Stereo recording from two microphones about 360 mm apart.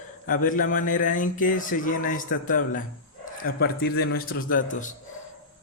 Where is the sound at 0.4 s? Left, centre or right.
Left.